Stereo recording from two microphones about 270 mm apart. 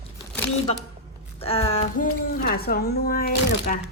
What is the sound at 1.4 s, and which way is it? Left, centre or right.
A woman's voice, left.